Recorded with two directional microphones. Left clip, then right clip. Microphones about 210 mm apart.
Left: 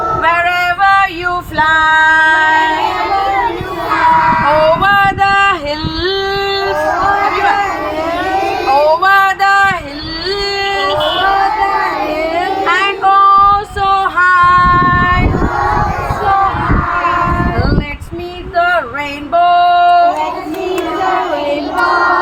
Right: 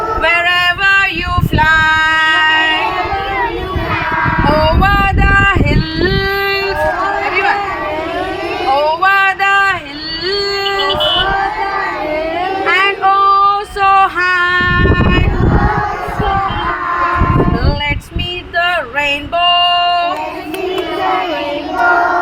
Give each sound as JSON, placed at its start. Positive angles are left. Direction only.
{"t": 0.2, "sound": "female singing", "side_deg": -55}
{"t": 4.8, "sound": "vehicle", "side_deg": -15}
{"t": 6.0, "sound": "a sound", "side_deg": -10}
{"t": 8.7, "sound": "a sound", "side_deg": 0}
{"t": 12.6, "sound": "female singing", "side_deg": -20}
{"t": 19.5, "sound": "female singing", "side_deg": -60}